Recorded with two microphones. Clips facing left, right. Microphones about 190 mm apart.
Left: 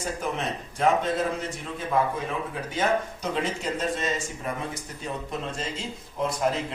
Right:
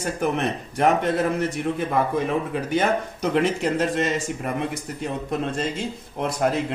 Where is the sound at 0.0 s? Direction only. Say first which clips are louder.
Right 6 dB; 65° right (ahead or behind).